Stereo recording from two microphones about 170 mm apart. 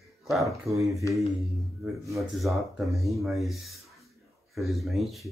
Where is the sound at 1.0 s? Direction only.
20° left (ahead or behind).